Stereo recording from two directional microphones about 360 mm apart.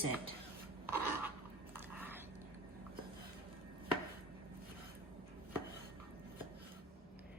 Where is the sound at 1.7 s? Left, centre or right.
Centre.